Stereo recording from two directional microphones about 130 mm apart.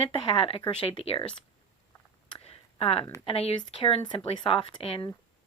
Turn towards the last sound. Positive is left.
turn(degrees=45)  # may be behind; listen again after turning